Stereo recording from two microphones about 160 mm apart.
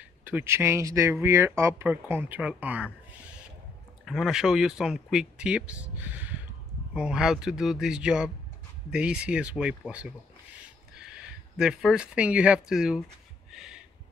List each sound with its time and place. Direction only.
0.2 s speech: 10° right (ahead or behind)
4.0 s speech: 5° right (ahead or behind)